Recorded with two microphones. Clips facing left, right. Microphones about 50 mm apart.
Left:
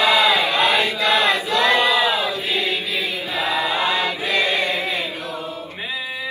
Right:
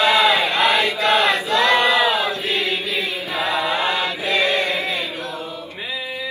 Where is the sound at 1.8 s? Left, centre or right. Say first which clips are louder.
Right 1 dB; right.